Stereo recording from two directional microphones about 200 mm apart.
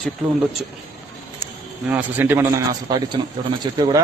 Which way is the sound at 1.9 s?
10° right (ahead or behind).